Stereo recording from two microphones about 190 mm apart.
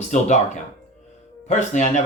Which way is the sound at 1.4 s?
40° left (ahead or behind).